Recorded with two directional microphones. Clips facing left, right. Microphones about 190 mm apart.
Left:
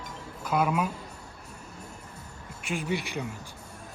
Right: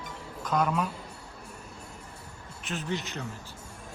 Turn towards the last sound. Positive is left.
turn(degrees=10)  # may be behind; listen again after turning